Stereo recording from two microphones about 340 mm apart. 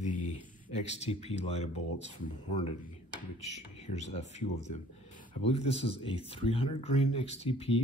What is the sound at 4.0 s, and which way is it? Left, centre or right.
Speech, centre.